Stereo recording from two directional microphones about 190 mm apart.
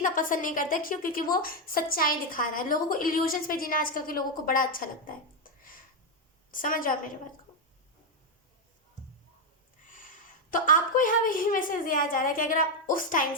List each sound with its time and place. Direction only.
0.0 s a woman's voice: 45° left (ahead or behind)
9.9 s a woman's voice: 45° left (ahead or behind)